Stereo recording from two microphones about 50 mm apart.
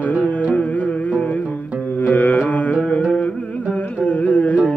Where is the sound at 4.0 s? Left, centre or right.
Left.